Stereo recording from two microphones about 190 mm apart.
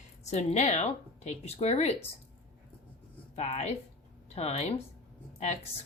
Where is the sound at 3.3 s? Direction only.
35° left (ahead or behind).